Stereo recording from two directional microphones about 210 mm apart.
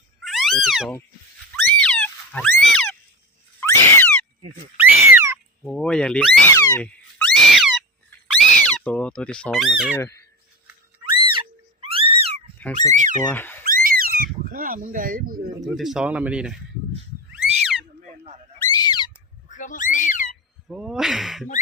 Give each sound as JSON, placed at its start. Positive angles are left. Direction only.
{"t": 0.3, "sound": "a sound", "side_deg": 0}
{"t": 4.8, "sound": "cat", "side_deg": -10}
{"t": 5.6, "sound": "speech", "side_deg": 0}
{"t": 10.0, "sound": "squeak", "side_deg": 15}
{"t": 11.1, "sound": "cat", "side_deg": -25}
{"t": 12.7, "sound": "speech", "side_deg": -35}
{"t": 13.3, "sound": "speech", "side_deg": 10}
{"t": 13.7, "sound": "a sound", "side_deg": -45}
{"t": 15.6, "sound": "speech", "side_deg": 0}
{"t": 18.6, "sound": "a sound", "side_deg": 20}
{"t": 19.5, "sound": "a sound", "side_deg": 35}
{"t": 20.7, "sound": "speech", "side_deg": 0}